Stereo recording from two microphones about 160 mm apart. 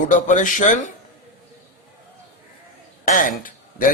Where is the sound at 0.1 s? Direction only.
50° left (ahead or behind).